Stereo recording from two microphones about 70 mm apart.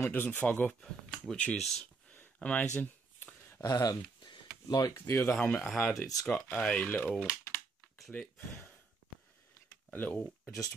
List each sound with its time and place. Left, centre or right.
0.0 s speech: left
0.7 s speech: centre
1.3 s speech: centre
1.6 s speech: centre
2.3 s a sound: centre
3.6 s a sound: left
4.9 s speech: left
5.2 s speech: centre
7.2 s typing: left
8.1 s a sound: left
9.8 s speech: left